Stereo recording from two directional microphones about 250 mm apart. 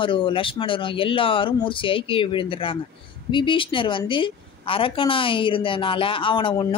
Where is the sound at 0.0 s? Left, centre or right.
Centre.